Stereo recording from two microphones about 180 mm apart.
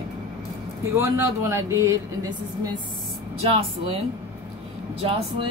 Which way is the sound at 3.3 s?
30° right (ahead or behind).